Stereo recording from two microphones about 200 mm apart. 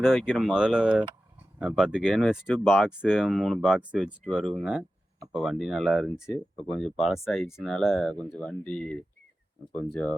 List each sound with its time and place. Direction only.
0.0 s speech: centre (ahead or behind)